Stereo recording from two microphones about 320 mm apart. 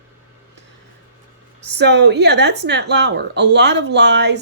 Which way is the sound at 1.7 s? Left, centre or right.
Right.